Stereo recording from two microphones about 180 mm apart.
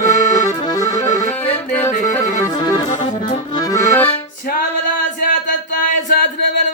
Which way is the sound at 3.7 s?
15° left (ahead or behind).